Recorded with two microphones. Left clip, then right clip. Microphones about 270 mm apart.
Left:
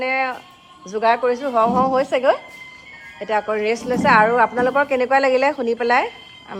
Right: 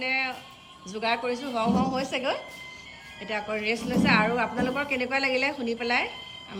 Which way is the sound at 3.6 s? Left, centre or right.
Centre.